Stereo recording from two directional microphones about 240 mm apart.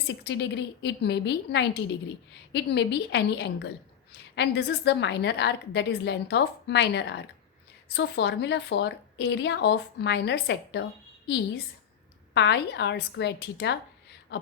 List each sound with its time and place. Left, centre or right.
0.1 s a woman's voice: left
12.3 s a woman's voice: left